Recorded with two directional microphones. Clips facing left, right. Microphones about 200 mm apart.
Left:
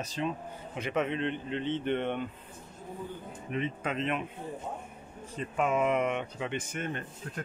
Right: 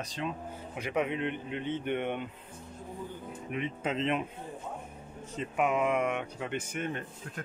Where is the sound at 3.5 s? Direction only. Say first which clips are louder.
Left 1 dB; 20° right (ahead or behind).